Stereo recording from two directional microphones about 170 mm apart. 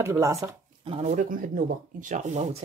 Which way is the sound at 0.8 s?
35° right (ahead or behind).